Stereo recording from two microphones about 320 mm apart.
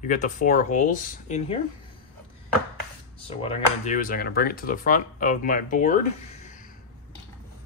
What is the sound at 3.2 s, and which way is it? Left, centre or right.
Speech, centre.